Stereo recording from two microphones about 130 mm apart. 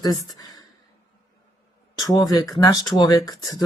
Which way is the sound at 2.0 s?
30° left (ahead or behind).